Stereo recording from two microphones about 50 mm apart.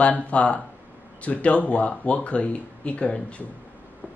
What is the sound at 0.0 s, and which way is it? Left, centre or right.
Speech, left.